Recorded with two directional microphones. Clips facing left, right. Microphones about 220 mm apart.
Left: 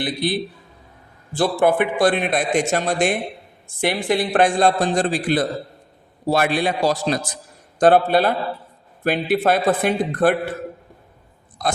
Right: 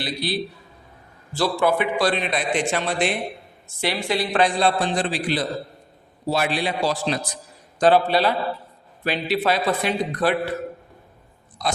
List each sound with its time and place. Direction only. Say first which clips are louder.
0.0 s a man's voice: left 4 dB; 50° left (ahead or behind)
11.6 s speech: left 2 dB; 50° left (ahead or behind)